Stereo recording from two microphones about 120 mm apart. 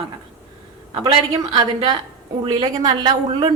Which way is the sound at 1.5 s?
35° right (ahead or behind).